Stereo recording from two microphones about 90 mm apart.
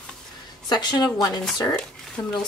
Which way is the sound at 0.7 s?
50° left (ahead or behind).